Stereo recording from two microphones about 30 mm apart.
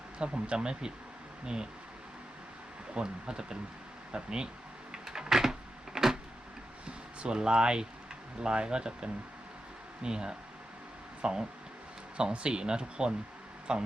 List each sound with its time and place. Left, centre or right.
0.2 s speech: right
2.9 s speech: right
4.9 s a sound: centre
6.8 s speech: right